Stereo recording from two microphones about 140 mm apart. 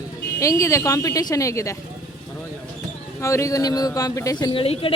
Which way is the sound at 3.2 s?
20° left (ahead or behind).